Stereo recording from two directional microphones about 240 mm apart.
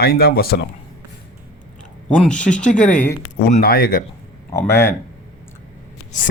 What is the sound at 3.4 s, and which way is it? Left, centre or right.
Speech, left.